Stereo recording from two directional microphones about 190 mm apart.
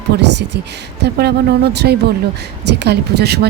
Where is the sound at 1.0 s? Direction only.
55° right (ahead or behind).